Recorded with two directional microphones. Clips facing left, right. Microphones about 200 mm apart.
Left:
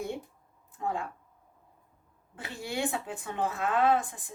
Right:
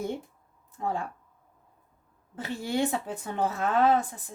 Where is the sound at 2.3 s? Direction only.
40° right (ahead or behind).